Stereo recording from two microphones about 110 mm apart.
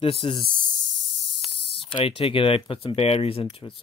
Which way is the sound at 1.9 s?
55° left (ahead or behind).